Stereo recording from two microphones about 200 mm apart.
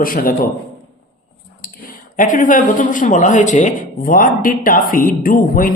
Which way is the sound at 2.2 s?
40° left (ahead or behind).